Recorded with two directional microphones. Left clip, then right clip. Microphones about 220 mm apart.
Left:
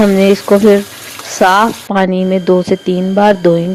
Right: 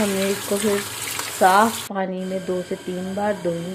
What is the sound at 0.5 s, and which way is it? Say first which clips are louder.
Speech: left 14 dB; 40° left (ahead or behind).